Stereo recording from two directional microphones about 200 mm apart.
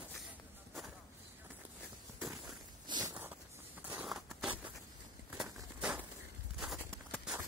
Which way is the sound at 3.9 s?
5° right (ahead or behind).